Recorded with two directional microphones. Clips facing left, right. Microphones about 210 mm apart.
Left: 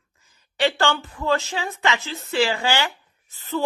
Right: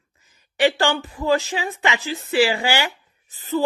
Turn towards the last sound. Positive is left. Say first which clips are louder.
# right 4 dB
turn(degrees=-15)  # may be behind; listen again after turning